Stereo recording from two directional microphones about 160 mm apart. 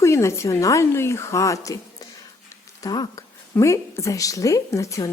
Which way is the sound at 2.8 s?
25° left (ahead or behind).